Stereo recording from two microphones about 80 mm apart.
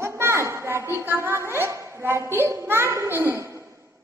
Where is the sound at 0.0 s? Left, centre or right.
Right.